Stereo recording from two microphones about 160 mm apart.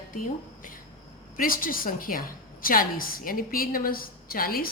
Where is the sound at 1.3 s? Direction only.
60° left (ahead or behind).